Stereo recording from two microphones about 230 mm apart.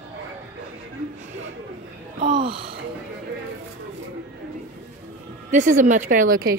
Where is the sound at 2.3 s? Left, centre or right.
Right.